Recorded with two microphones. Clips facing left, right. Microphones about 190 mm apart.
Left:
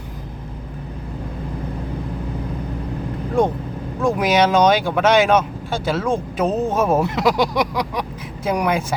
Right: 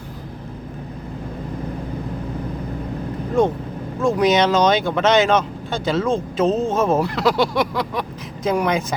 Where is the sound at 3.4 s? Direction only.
15° left (ahead or behind).